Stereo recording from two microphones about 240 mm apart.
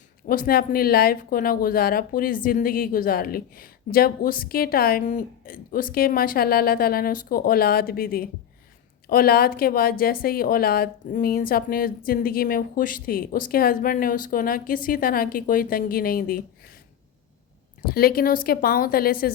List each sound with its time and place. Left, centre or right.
0.3 s speech: left
17.8 s speech: left